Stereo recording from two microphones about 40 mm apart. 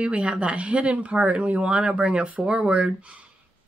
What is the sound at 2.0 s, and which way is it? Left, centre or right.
Speech, right.